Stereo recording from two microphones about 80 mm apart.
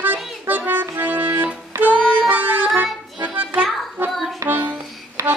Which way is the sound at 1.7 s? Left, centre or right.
Right.